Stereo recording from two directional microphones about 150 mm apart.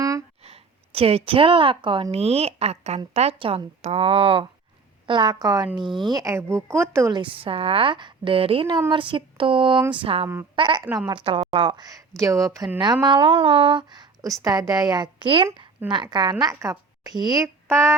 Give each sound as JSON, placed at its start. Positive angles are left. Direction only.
{"t": 0.0, "sound": "a sound", "side_deg": -20}
{"t": 0.4, "sound": "a woman's voice", "side_deg": -40}
{"t": 2.1, "sound": "a woman's voice", "side_deg": -45}
{"t": 7.2, "sound": "a woman's voice", "side_deg": -35}